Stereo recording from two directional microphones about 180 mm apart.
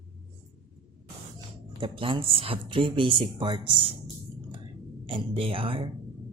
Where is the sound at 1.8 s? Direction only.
30° right (ahead or behind).